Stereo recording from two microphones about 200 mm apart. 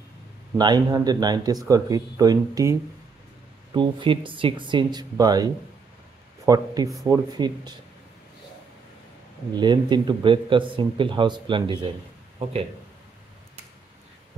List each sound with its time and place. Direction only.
0.6 s speech: 20° right (ahead or behind)
9.6 s speech: 20° right (ahead or behind)